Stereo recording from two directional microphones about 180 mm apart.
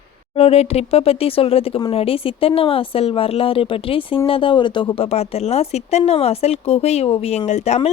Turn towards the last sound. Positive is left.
turn(degrees=35)  # may be behind; listen again after turning